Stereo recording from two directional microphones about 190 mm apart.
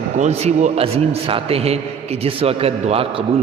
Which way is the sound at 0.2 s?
35° right (ahead or behind).